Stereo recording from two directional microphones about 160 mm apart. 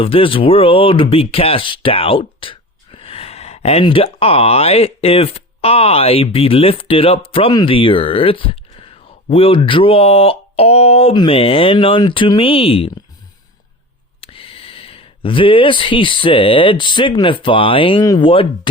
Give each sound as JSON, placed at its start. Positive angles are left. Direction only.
{"t": 0.0, "sound": "speech", "side_deg": 35}
{"t": 14.2, "sound": "speech", "side_deg": 35}